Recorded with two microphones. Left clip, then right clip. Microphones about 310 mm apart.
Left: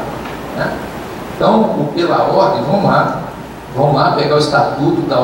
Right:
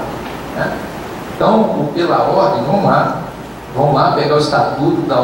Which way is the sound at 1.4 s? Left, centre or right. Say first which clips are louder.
Even; left.